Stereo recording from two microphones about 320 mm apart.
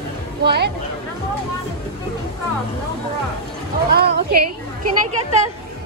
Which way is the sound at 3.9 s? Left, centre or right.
Right.